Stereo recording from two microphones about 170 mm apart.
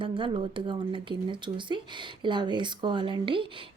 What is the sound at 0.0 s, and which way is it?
Speech, 30° right (ahead or behind).